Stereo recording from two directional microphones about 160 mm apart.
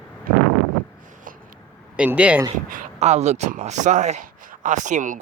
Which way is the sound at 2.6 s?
50° right (ahead or behind).